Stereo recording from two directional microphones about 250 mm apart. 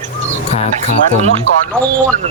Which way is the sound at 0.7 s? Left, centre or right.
Right.